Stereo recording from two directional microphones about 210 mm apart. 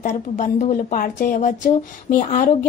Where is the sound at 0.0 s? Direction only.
35° left (ahead or behind).